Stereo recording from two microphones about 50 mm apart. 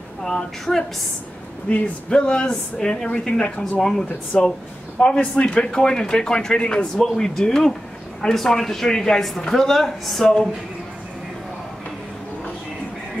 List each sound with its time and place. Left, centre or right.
0.2 s speech: centre
7.0 s speech: centre
10.2 s speech: centre